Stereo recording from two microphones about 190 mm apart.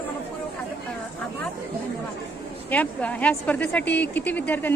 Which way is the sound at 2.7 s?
5° left (ahead or behind).